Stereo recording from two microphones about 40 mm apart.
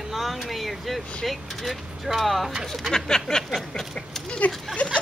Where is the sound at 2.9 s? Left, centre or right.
Centre.